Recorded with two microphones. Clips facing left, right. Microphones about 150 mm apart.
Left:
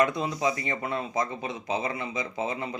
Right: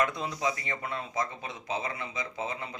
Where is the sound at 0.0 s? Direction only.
20° left (ahead or behind).